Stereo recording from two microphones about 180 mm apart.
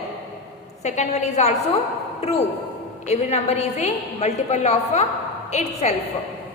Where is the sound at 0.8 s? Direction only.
40° left (ahead or behind).